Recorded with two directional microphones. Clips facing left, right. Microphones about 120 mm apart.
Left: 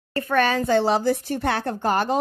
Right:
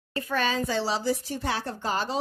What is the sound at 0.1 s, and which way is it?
A woman's voice, 60° left (ahead or behind).